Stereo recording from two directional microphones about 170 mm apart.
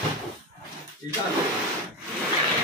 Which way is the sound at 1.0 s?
25° left (ahead or behind).